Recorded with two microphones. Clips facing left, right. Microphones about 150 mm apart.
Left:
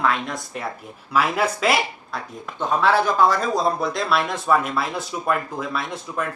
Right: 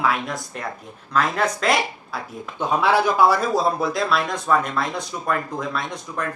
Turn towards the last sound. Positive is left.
turn(degrees=5)  # may be behind; listen again after turning